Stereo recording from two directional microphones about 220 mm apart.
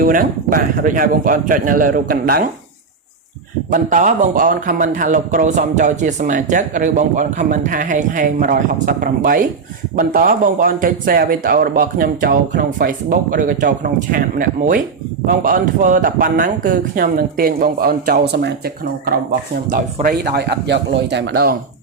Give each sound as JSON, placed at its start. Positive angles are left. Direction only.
{"t": 0.0, "sound": "speech", "side_deg": -40}
{"t": 3.7, "sound": "speech", "side_deg": -35}